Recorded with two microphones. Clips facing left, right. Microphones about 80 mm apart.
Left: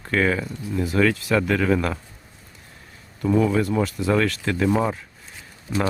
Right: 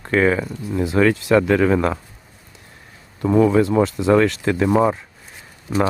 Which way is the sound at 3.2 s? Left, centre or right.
Right.